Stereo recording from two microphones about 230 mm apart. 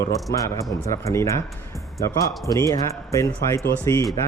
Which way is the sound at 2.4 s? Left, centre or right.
Centre.